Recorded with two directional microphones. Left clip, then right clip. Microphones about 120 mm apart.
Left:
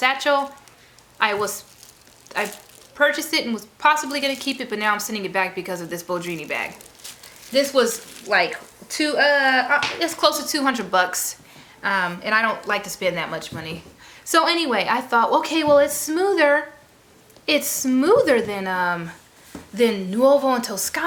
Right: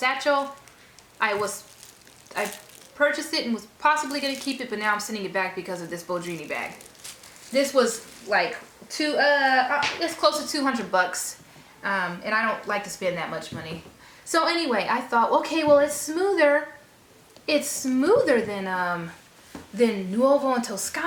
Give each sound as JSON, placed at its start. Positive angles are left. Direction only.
{"t": 0.0, "sound": "a woman's voice", "side_deg": 25}
{"t": 3.0, "sound": "a woman's voice", "side_deg": 25}